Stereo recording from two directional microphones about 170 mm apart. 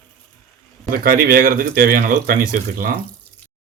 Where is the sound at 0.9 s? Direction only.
55° right (ahead or behind).